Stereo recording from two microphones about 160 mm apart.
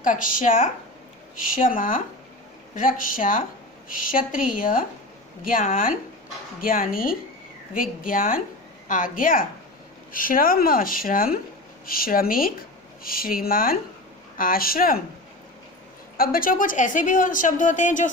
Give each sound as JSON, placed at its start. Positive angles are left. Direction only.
{"t": 0.0, "sound": "a woman's voice", "side_deg": 55}
{"t": 16.1, "sound": "a woman's voice", "side_deg": 65}